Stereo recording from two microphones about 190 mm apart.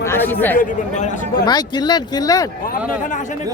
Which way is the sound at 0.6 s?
40° left (ahead or behind).